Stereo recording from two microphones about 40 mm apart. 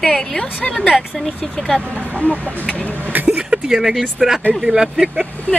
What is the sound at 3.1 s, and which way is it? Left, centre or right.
Vehicle, right.